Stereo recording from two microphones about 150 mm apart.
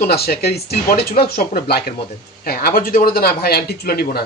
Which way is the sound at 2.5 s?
75° left (ahead or behind).